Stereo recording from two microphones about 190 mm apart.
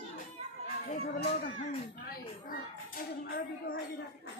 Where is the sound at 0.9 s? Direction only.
60° left (ahead or behind).